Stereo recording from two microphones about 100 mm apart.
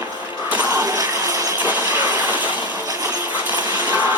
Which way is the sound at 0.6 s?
35° right (ahead or behind).